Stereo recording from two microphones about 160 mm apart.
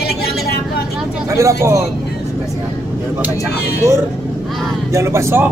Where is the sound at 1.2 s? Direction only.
20° right (ahead or behind).